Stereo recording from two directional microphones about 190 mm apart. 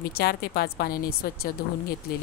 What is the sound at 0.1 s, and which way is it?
Speech, 55° left (ahead or behind).